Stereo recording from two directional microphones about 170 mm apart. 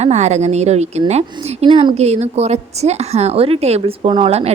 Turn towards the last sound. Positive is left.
turn(degrees=-35)  # may be behind; listen again after turning